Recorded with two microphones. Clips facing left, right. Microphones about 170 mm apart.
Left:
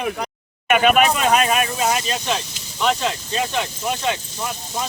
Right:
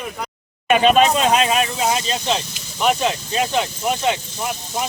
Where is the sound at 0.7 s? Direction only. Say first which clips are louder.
Right 2 dB; 30° right (ahead or behind).